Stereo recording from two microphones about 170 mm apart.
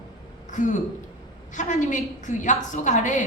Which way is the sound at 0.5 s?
45° left (ahead or behind).